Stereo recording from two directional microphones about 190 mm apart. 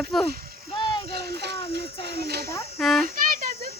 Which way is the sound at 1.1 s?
60° right (ahead or behind).